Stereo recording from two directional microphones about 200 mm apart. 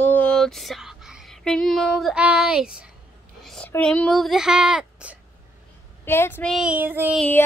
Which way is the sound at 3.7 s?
5° left (ahead or behind).